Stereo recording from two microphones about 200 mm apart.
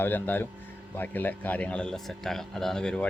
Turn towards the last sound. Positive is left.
turn(degrees=5)  # may be behind; listen again after turning